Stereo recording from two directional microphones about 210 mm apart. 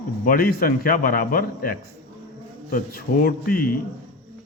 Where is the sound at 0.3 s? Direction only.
45° left (ahead or behind).